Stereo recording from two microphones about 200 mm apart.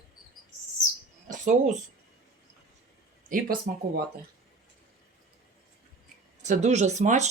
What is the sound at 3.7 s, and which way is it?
Speech, 50° right (ahead or behind).